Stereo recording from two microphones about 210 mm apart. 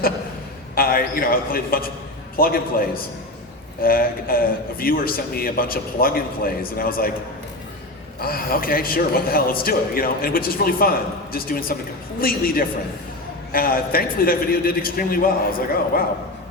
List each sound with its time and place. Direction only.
0.8 s a man's voice: 45° left (ahead or behind)
8.2 s a man's voice: 45° left (ahead or behind)